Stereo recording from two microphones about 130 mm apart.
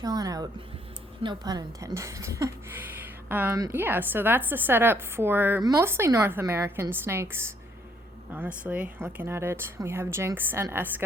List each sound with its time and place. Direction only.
0.0 s a woman's voice: 30° right (ahead or behind)